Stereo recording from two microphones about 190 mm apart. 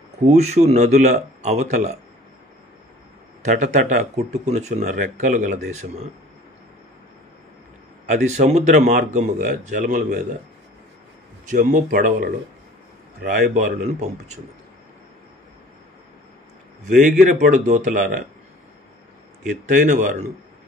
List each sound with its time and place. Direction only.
0.3 s speech: 35° right (ahead or behind)
3.4 s speech: 40° right (ahead or behind)
8.1 s speech: 40° right (ahead or behind)
11.5 s speech: 45° right (ahead or behind)
16.9 s speech: 45° right (ahead or behind)
19.4 s speech: 40° right (ahead or behind)